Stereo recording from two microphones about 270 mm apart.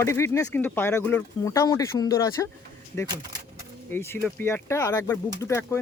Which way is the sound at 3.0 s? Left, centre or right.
Centre.